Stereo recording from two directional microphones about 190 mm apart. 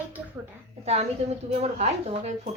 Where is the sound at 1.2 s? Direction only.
35° right (ahead or behind).